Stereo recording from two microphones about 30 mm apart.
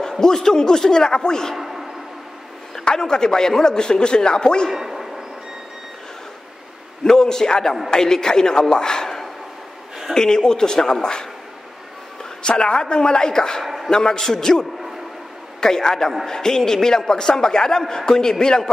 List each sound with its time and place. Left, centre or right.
0.0 s a man's voice: centre
1.6 s a sound: centre
2.8 s a man's voice: left
4.7 s a sound: centre
7.1 s a man's voice: centre
12.4 s a man's voice: left